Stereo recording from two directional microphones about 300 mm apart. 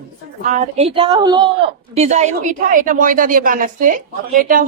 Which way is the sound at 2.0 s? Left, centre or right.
Right.